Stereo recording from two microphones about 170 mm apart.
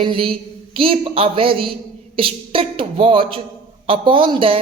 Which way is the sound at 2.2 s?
30° right (ahead or behind).